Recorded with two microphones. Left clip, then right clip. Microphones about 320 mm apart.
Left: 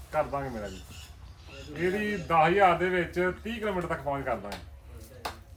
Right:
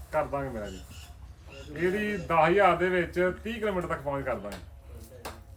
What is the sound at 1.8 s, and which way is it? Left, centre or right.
A man's voice, centre.